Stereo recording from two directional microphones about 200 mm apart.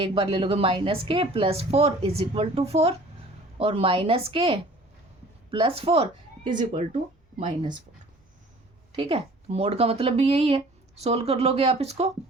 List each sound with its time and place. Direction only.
0.1 s a woman's voice: 25° right (ahead or behind)
9.0 s speech: 30° right (ahead or behind)